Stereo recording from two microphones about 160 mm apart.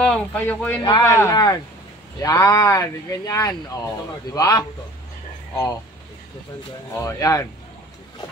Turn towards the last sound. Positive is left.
turn(degrees=20)  # may be behind; listen again after turning